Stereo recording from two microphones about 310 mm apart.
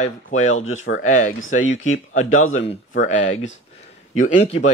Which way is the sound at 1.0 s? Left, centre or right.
Left.